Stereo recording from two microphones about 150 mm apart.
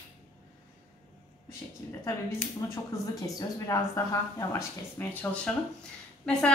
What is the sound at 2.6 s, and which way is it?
Speech, 25° left (ahead or behind).